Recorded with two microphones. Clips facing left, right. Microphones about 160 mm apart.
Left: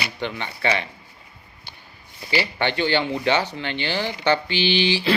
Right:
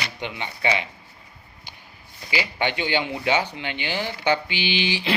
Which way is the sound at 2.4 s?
15° right (ahead or behind).